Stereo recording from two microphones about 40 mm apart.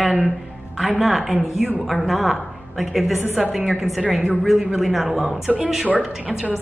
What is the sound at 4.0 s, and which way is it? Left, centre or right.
Speech, right.